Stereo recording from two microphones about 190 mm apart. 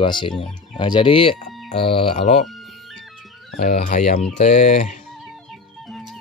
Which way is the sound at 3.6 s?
45° left (ahead or behind).